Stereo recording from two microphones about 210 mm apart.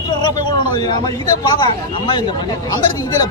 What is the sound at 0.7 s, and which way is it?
Speech, 20° left (ahead or behind).